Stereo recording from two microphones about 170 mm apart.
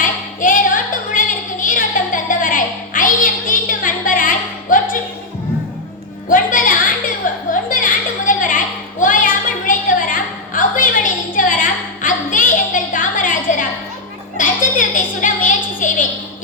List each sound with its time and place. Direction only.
0.0 s music: 50° left (ahead or behind)
6.2 s music: 50° left (ahead or behind)
7.7 s a sound: 55° left (ahead or behind)